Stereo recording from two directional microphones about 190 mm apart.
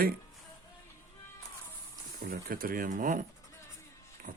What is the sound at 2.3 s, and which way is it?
Speech, 50° right (ahead or behind).